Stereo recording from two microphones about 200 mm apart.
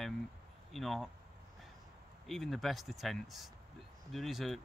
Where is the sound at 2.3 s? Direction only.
Centre (ahead or behind).